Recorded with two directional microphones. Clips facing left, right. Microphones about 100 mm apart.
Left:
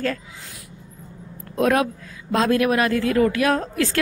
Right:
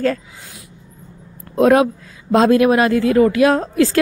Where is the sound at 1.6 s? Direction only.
25° right (ahead or behind).